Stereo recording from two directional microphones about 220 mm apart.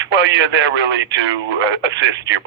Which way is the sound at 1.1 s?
55° right (ahead or behind).